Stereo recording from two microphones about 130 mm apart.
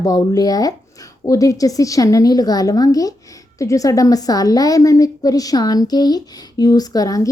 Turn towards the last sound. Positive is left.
turn(degrees=25)  # may be behind; listen again after turning